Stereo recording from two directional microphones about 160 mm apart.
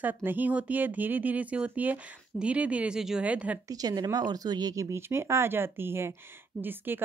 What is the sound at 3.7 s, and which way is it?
A woman's voice, 25° right (ahead or behind).